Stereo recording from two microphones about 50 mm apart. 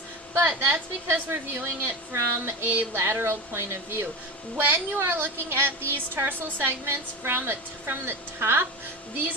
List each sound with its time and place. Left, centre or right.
0.3 s a woman's voice: right
4.5 s a woman's voice: right
4.9 s a woman's voice: right